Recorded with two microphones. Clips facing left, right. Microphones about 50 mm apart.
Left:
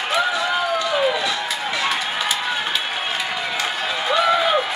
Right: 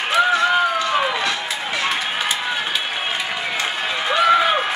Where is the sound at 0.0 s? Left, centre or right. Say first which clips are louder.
Right 3 dB; centre.